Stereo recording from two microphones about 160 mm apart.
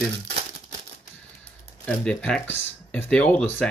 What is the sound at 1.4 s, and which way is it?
Speech, 5° left (ahead or behind).